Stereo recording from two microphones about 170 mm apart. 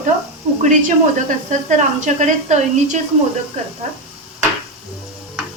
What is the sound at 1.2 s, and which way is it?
Speech, 45° right (ahead or behind).